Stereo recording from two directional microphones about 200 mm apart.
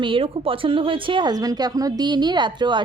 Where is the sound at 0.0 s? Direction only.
25° right (ahead or behind).